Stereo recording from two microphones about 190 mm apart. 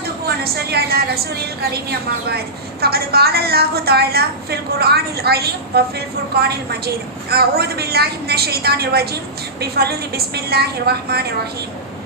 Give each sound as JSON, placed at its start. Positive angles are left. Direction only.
{"t": 0.3, "sound": "a woman's voice", "side_deg": -55}
{"t": 2.8, "sound": "a woman's voice", "side_deg": -55}